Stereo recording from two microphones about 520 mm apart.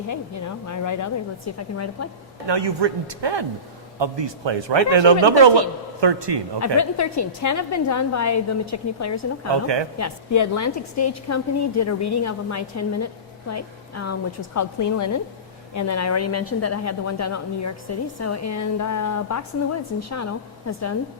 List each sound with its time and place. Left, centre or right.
0.1 s a woman's voice: left
2.5 s a man's voice: right
6.7 s a woman's voice: left